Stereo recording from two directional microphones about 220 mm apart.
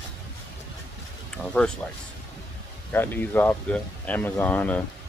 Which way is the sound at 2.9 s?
10° left (ahead or behind).